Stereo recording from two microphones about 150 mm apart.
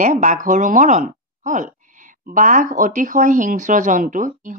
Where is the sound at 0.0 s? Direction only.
55° right (ahead or behind).